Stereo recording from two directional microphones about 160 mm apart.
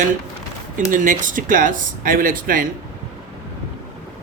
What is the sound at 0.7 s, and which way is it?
Speech, 55° right (ahead or behind).